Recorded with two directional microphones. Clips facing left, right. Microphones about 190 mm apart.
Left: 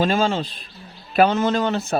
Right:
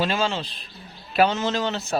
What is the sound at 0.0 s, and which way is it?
A man's voice, 50° left (ahead or behind).